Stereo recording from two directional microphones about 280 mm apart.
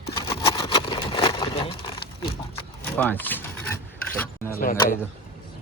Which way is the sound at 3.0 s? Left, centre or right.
Centre.